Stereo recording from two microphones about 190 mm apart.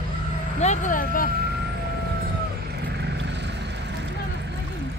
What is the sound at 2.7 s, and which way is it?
Vehicle, 60° right (ahead or behind).